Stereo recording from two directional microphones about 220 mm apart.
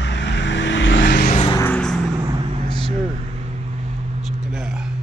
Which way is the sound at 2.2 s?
20° right (ahead or behind).